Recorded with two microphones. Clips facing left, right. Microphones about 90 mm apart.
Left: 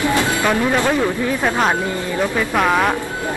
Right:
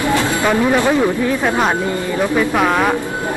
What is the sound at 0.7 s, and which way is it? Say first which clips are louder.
Speech: right 3 dB; 15° right (ahead or behind).